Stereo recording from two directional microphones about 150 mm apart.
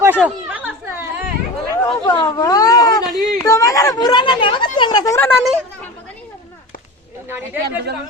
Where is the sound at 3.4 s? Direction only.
20° left (ahead or behind).